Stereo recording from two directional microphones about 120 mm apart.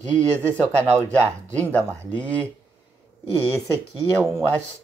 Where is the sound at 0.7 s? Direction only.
20° right (ahead or behind).